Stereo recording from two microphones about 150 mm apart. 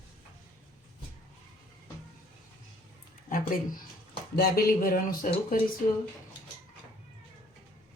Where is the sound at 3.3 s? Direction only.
65° left (ahead or behind).